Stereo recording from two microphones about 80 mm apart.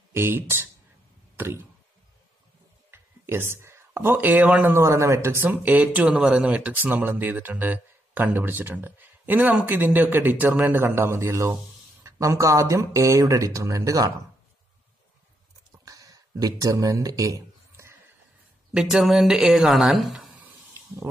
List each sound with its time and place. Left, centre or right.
0.1 s speech: right
1.3 s a sound: right
2.9 s speech: right
4.7 s speech: right
15.8 s speech: right
18.7 s speech: centre
20.7 s a sound: right